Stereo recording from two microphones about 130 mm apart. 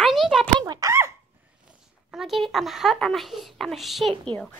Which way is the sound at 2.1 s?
Centre (ahead or behind).